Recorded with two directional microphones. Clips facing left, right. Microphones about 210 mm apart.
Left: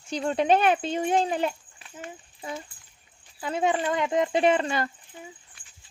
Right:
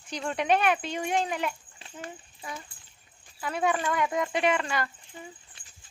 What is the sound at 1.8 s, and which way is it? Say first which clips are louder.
Horse: right 1 dB; 25° right (ahead or behind).